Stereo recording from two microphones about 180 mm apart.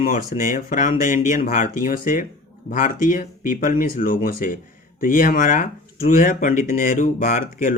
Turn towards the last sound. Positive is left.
turn(degrees=45)  # may be behind; listen again after turning